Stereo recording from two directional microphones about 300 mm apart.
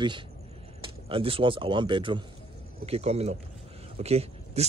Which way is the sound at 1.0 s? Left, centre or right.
Centre.